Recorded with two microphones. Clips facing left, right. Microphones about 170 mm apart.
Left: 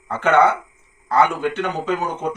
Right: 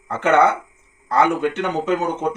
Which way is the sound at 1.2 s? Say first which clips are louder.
Even; 20° right (ahead or behind).